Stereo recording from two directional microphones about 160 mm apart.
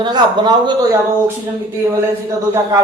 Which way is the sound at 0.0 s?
25° right (ahead or behind).